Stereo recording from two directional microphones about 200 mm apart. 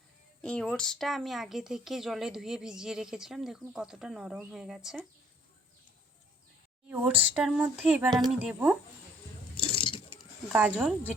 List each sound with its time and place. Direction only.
0.4 s speech: 5° left (ahead or behind)
6.8 s speech: 5° right (ahead or behind)
9.6 s squish: 25° left (ahead or behind)
10.5 s speech: 5° right (ahead or behind)